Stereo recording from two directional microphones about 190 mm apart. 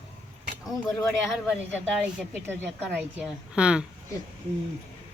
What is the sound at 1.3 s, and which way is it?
Speech, 5° right (ahead or behind).